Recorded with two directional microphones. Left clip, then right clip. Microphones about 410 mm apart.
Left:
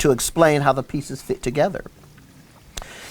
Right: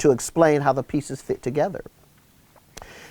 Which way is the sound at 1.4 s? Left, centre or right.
Right.